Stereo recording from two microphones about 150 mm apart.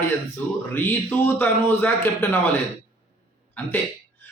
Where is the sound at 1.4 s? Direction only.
15° left (ahead or behind).